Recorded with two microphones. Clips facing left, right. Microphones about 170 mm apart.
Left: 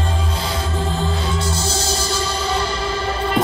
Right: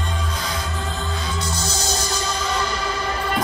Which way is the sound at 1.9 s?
30° left (ahead or behind).